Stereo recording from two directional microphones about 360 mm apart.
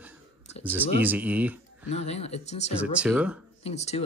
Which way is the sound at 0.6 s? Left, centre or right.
Centre.